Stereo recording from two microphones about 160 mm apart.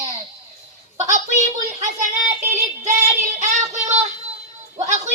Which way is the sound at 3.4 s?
50° right (ahead or behind).